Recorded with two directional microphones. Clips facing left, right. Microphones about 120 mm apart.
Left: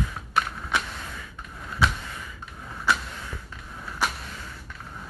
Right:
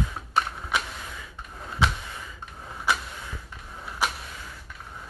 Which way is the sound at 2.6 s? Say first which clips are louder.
Left 1 dB; 20° right (ahead or behind).